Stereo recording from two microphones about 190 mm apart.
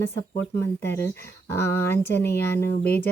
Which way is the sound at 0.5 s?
15° left (ahead or behind).